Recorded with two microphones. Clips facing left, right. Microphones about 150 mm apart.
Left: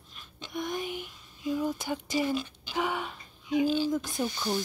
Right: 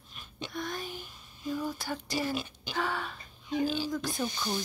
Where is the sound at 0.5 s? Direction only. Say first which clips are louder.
Left 5 dB; 20° left (ahead or behind).